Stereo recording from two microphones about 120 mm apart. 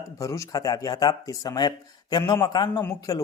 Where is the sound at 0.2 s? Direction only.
25° left (ahead or behind).